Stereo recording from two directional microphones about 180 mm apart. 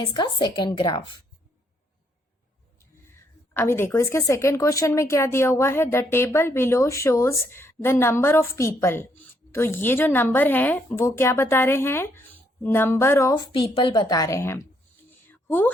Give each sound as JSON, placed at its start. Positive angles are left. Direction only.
{"t": 0.0, "sound": "a woman's voice", "side_deg": 25}
{"t": 3.5, "sound": "speech", "side_deg": 10}
{"t": 15.3, "sound": "a sound", "side_deg": 10}